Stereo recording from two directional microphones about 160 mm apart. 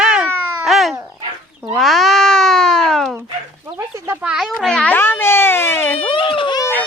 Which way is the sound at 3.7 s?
10° right (ahead or behind).